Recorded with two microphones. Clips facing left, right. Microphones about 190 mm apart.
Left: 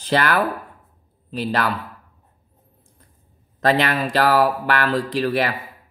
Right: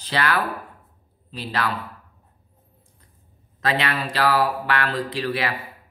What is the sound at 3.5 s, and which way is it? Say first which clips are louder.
Speech: left 5 dB; 45° left (ahead or behind).